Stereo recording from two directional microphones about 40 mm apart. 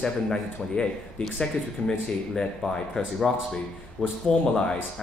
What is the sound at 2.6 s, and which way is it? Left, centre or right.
A man's voice, centre.